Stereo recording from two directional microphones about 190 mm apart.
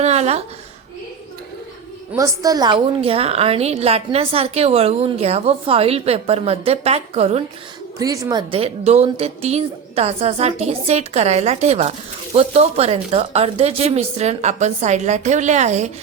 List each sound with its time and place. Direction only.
0.0 s a woman's voice: 35° right (ahead or behind)
2.1 s a woman's voice: 15° right (ahead or behind); by 7.4 s 35° right (ahead or behind)
7.9 s a woman's voice: 20° right (ahead or behind); by 15.9 s 35° right (ahead or behind)